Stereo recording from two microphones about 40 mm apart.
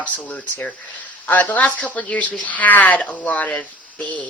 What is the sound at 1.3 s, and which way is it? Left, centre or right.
Speech, left.